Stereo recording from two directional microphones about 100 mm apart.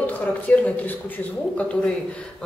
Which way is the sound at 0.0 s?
15° left (ahead or behind).